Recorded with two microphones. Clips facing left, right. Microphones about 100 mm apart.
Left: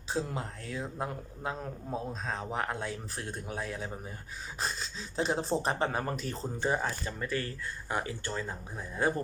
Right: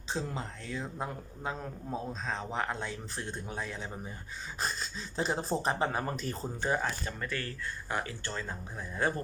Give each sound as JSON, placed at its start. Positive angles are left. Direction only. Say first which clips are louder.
{"t": 0.1, "sound": "a man's voice", "louder": "left 2 dB", "side_deg": 5}
{"t": 6.7, "sound": "speech", "louder": "left 1 dB", "side_deg": 20}